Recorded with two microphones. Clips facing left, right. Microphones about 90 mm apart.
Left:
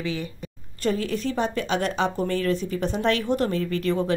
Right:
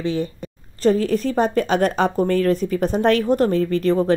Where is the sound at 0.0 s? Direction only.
35° right (ahead or behind).